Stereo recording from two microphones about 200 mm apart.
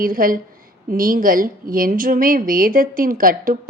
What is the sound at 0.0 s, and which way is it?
A woman's voice, 45° right (ahead or behind).